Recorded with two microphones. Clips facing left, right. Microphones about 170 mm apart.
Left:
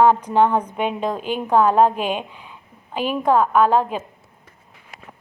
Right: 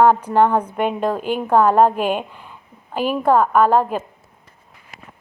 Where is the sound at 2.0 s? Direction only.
50° right (ahead or behind).